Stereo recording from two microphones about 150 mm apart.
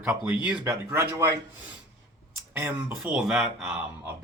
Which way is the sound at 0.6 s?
20° right (ahead or behind).